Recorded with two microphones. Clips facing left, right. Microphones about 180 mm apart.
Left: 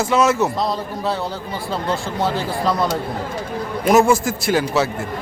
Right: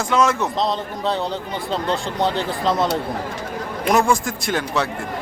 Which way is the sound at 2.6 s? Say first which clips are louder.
Even; 20° right (ahead or behind).